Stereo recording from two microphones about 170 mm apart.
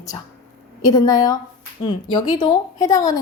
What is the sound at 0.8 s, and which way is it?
A woman's voice, 20° left (ahead or behind).